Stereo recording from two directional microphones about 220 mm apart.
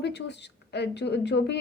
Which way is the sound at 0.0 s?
50° left (ahead or behind).